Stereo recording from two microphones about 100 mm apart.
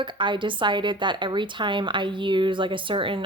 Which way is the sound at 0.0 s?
55° right (ahead or behind).